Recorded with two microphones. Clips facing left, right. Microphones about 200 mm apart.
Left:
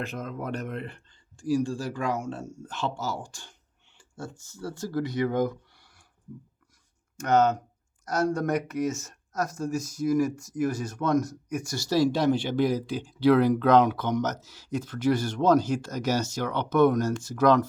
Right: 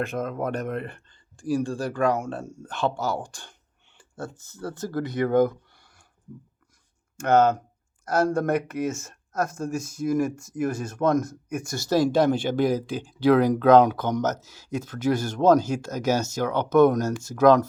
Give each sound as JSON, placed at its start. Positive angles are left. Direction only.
{"t": 0.0, "sound": "speech", "side_deg": -50}
{"t": 7.2, "sound": "speech", "side_deg": -55}